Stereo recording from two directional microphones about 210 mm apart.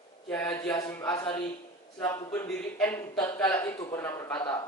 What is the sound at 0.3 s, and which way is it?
A man's voice, 5° left (ahead or behind).